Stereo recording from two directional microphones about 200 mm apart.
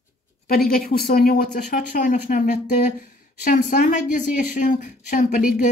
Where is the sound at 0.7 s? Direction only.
45° left (ahead or behind).